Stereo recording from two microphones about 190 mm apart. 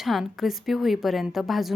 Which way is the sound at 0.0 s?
Centre (ahead or behind).